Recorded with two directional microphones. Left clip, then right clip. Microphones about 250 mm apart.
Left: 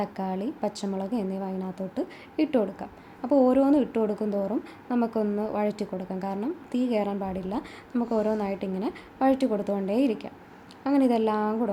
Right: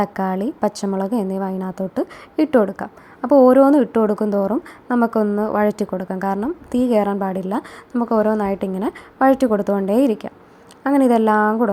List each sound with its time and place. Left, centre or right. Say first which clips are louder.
0.0 s a woman's voice: right 10 dB; right